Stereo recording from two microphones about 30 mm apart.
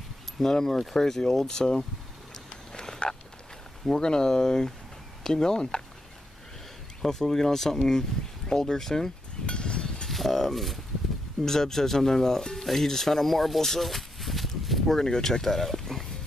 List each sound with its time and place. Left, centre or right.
0.4 s speech: centre
2.7 s frog: left
4.0 s speech: left
7.1 s speech: centre
9.5 s a sound: left
10.0 s speech: centre
11.4 s speech: centre
12.5 s music: centre
12.8 s speech: centre
13.8 s a sound: centre
14.9 s speech: left
15.4 s a sound: centre